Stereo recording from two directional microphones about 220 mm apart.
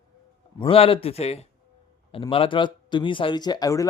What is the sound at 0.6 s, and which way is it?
Speech, 25° left (ahead or behind).